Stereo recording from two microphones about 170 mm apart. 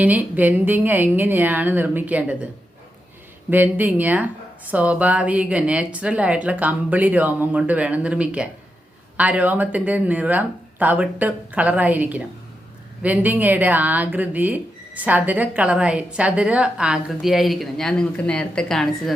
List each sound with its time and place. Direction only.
0.0 s speech: 10° right (ahead or behind)
3.5 s speech: 10° right (ahead or behind)